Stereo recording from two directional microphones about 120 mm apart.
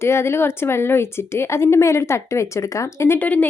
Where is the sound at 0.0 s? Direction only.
20° left (ahead or behind).